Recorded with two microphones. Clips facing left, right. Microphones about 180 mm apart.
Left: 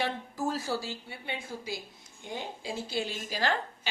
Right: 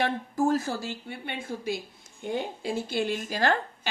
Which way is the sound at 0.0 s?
50° right (ahead or behind).